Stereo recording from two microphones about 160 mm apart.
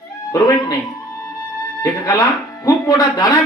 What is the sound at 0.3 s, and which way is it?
Speech, 20° left (ahead or behind).